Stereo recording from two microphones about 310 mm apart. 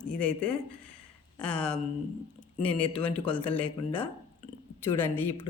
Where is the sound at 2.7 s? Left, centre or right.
Centre.